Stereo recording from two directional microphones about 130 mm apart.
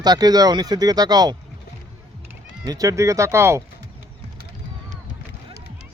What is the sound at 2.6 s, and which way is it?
Speech, 25° right (ahead or behind).